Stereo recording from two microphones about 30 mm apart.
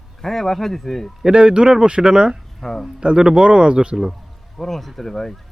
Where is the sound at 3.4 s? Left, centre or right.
Right.